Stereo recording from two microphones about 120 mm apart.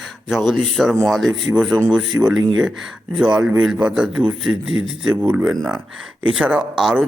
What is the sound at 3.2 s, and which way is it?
Speech, 10° right (ahead or behind).